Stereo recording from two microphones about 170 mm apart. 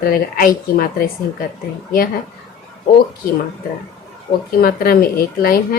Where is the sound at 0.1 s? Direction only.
55° left (ahead or behind).